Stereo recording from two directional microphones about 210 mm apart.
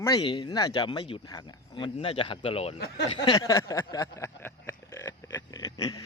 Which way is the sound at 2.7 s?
50° left (ahead or behind).